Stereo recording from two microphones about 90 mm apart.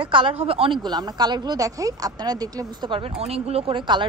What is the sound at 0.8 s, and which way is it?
Speech, 50° right (ahead or behind).